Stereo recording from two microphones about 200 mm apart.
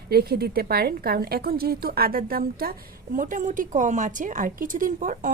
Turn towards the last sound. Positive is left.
turn(degrees=-40)  # may be behind; listen again after turning